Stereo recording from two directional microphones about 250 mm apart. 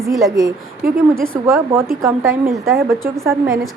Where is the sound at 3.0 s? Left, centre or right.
Centre.